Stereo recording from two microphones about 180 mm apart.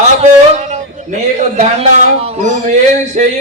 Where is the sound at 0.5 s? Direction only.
40° right (ahead or behind).